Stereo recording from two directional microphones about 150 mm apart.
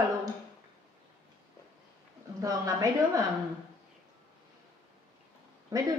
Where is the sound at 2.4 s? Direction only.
25° right (ahead or behind).